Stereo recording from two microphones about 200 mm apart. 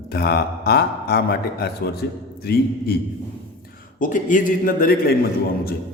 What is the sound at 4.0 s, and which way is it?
Speech, 40° left (ahead or behind).